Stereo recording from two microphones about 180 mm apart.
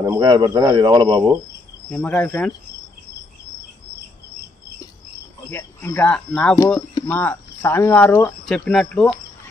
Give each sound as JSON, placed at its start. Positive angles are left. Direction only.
{"t": 0.0, "sound": "speech", "side_deg": -20}
{"t": 1.9, "sound": "speech", "side_deg": 5}
{"t": 5.5, "sound": "speech", "side_deg": 15}